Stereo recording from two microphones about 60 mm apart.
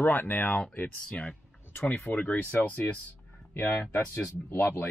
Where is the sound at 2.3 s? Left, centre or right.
Left.